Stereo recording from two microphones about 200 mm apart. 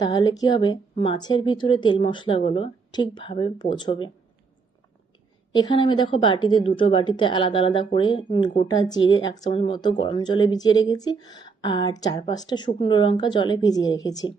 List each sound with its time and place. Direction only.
0.0 s speech: 20° left (ahead or behind)
5.5 s speech: 20° left (ahead or behind)